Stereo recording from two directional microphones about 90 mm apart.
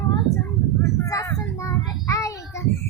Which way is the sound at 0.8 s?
35° left (ahead or behind).